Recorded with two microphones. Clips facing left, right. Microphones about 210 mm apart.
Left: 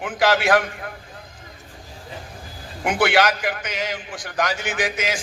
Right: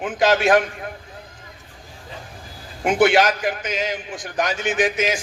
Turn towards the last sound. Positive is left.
turn(degrees=-20)  # may be behind; listen again after turning